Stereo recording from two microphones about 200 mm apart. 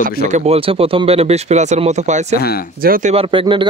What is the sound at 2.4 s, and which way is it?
Speech, 50° left (ahead or behind).